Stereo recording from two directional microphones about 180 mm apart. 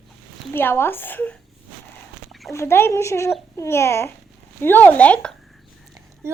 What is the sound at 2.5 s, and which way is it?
A woman's voice, 15° left (ahead or behind).